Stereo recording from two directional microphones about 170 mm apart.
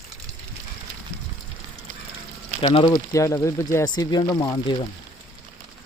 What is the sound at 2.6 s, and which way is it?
Speech, 35° left (ahead or behind).